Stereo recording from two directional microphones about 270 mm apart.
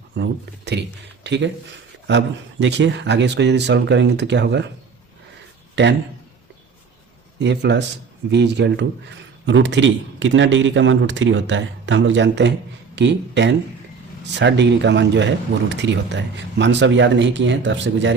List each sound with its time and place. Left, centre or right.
0.2 s speech: right
5.8 s speech: right
7.3 s a man's voice: right